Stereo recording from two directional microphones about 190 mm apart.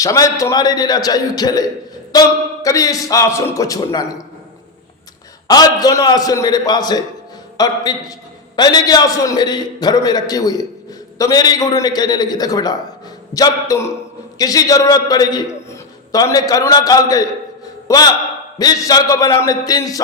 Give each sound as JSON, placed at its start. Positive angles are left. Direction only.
{"t": 0.0, "sound": "a man's voice", "side_deg": 15}
{"t": 5.5, "sound": "a man's voice", "side_deg": 20}